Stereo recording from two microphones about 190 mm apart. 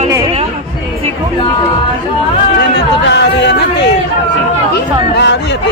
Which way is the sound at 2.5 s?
65° left (ahead or behind).